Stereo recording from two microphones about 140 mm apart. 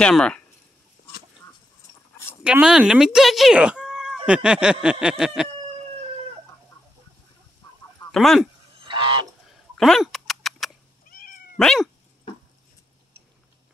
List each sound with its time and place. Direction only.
0.0 s speech: 5° left (ahead or behind)
2.4 s speech: 5° right (ahead or behind)
4.3 s a sound: 5° right (ahead or behind)
8.1 s speech: centre (ahead or behind)
8.8 s goose: 35° right (ahead or behind)
9.8 s dog: centre (ahead or behind)
11.1 s cat: 80° left
11.5 s cat: 5° left (ahead or behind)